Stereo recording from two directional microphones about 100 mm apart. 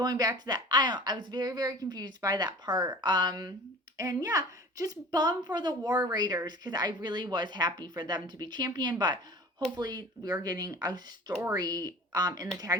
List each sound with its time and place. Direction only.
0.0 s a woman's voice: 40° right (ahead or behind)